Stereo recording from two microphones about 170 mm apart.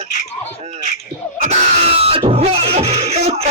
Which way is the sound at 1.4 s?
35° right (ahead or behind).